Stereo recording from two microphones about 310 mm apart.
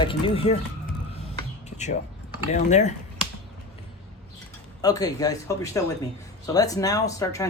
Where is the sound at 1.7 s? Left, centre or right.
Left.